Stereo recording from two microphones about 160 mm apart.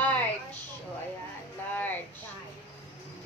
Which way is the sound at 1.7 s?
10° left (ahead or behind).